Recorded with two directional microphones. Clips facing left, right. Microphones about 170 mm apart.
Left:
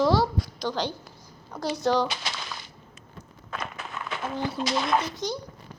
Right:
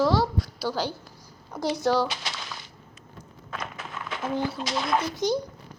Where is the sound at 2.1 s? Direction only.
60° left (ahead or behind).